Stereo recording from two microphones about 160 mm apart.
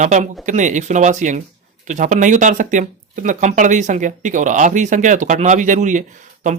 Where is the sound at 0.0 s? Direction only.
50° right (ahead or behind).